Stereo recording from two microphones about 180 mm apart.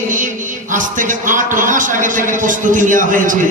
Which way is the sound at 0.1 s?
45° right (ahead or behind).